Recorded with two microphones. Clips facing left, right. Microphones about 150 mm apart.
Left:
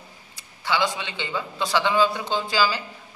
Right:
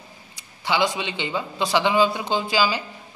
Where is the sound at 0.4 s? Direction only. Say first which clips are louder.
Right 2 dB; 15° right (ahead or behind).